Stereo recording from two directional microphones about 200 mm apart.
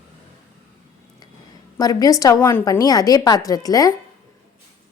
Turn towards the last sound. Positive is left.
turn(degrees=20)  # may be behind; listen again after turning